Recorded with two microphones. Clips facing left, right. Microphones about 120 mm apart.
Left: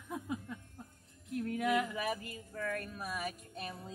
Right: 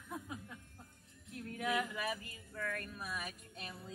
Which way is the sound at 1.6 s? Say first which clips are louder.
Left 3 dB; 15° left (ahead or behind).